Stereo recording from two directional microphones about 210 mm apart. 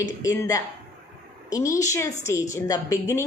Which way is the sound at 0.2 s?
15° left (ahead or behind).